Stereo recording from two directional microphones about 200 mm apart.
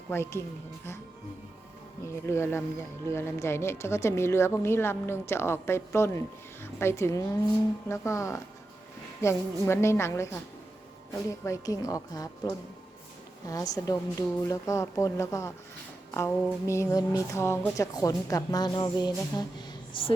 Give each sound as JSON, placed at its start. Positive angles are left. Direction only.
{"t": 0.1, "sound": "speech", "side_deg": 10}
{"t": 2.2, "sound": "speech", "side_deg": 15}
{"t": 11.4, "sound": "speech", "side_deg": 15}